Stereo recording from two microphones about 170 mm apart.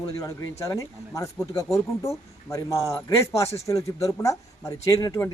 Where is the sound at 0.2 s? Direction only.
20° left (ahead or behind).